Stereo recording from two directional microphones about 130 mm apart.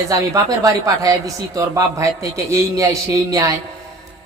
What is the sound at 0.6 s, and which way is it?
A man's voice, 25° right (ahead or behind).